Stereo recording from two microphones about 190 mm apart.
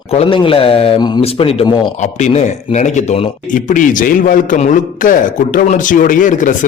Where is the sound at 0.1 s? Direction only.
30° left (ahead or behind).